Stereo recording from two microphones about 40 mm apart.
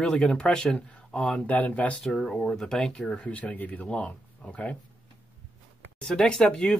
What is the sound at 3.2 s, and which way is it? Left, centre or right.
Speech, left.